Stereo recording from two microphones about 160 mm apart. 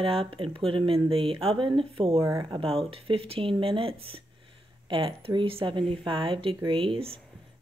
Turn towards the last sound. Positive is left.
turn(degrees=-35)  # may be behind; listen again after turning